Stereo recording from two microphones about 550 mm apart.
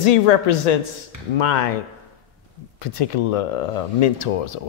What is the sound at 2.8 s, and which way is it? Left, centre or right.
Speech, left.